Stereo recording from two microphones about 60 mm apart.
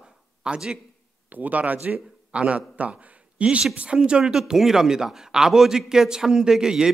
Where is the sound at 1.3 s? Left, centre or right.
Right.